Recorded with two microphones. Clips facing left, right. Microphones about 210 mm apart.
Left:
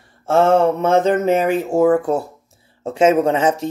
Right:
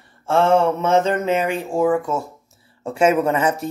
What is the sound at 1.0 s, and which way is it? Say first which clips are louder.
Speech: left 4 dB; 45° left (ahead or behind).